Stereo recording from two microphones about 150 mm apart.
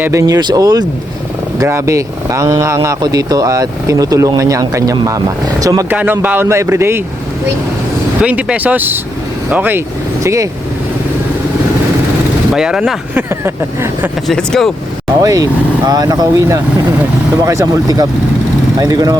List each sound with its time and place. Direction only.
0.0 s speech: 20° right (ahead or behind)
6.0 s speech: 10° right (ahead or behind)
8.2 s speech: 10° right (ahead or behind)
12.5 s speech: 5° right (ahead or behind)
14.3 s speech: 5° left (ahead or behind)
15.2 s speech: 25° right (ahead or behind)